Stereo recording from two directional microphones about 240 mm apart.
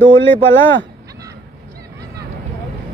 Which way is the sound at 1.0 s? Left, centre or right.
Centre.